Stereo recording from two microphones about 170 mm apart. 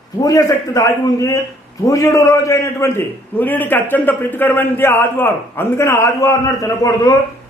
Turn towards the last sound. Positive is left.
turn(degrees=20)  # may be behind; listen again after turning